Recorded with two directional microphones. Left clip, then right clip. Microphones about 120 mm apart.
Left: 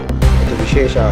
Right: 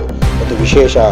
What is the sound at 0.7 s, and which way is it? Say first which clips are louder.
Speech: right 8 dB; 40° right (ahead or behind).